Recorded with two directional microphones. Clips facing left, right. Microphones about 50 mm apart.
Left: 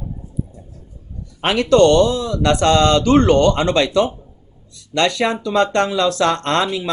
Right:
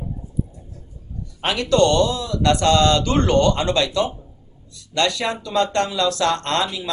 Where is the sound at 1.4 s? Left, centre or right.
Left.